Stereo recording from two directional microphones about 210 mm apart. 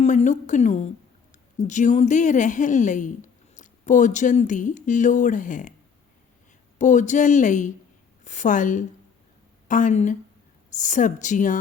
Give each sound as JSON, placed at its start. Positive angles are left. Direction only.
{"t": 0.0, "sound": "speech", "side_deg": 35}
{"t": 6.7, "sound": "speech", "side_deg": 35}